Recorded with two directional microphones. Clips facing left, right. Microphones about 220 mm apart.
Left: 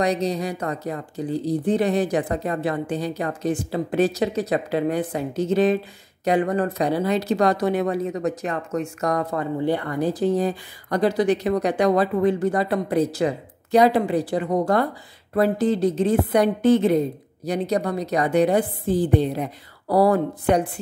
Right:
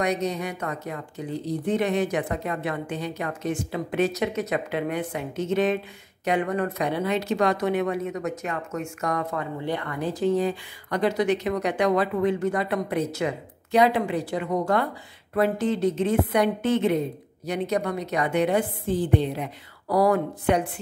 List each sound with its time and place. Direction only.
0.0 s speech: 35° left (ahead or behind)